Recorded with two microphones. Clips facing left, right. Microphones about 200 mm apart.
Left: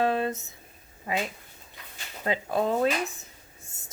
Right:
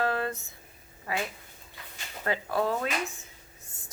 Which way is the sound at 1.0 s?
20° left (ahead or behind).